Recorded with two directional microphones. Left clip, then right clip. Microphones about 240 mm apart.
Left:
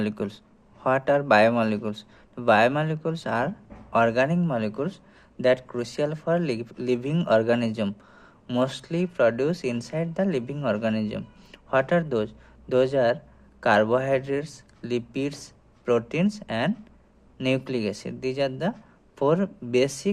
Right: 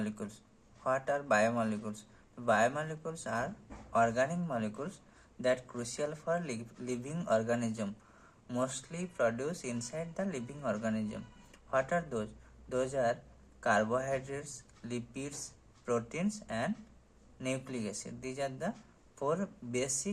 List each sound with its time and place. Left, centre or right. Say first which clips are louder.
0.0 s speech: left 12 dB; left